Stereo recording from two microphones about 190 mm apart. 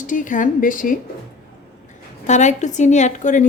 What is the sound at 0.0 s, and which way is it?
Speech, 45° left (ahead or behind).